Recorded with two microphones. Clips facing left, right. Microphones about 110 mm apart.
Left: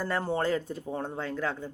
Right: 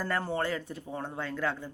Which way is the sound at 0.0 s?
20° left (ahead or behind).